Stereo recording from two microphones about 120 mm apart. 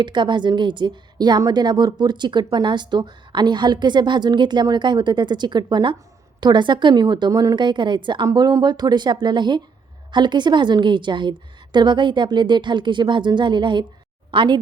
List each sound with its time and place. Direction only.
0.0 s a woman's voice: 40° right (ahead or behind)
8.3 s a woman's voice: 30° right (ahead or behind)